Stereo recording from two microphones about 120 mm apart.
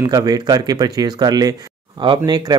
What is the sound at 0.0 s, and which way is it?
Speech, 30° right (ahead or behind).